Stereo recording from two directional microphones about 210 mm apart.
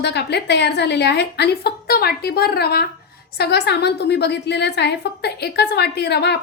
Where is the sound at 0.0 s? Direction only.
50° left (ahead or behind).